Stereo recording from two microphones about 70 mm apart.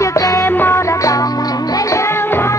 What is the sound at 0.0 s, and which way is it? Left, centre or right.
Music, left.